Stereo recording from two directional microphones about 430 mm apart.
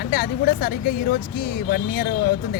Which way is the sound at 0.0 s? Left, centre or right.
Centre.